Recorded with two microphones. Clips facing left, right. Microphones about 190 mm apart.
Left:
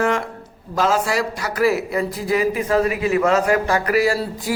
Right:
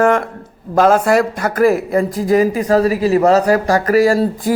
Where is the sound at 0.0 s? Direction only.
55° right (ahead or behind).